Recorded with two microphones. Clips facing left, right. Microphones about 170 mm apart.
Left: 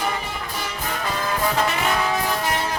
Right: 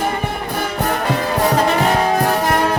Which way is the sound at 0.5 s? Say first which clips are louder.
Right 10 dB; 55° right (ahead or behind).